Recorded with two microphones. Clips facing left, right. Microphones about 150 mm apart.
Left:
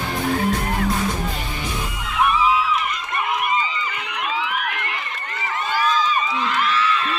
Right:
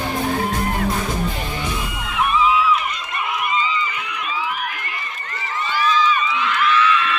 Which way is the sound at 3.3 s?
55° left (ahead or behind).